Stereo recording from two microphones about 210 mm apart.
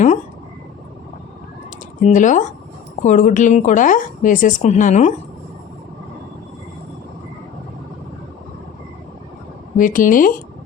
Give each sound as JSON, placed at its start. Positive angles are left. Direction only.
{"t": 2.0, "sound": "a woman's voice", "side_deg": 35}
{"t": 9.7, "sound": "a woman's voice", "side_deg": 40}